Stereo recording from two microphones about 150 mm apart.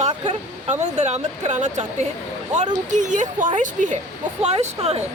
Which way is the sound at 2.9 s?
55° right (ahead or behind).